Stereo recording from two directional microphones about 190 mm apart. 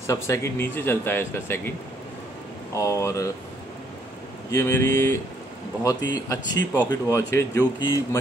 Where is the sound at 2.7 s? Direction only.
15° left (ahead or behind).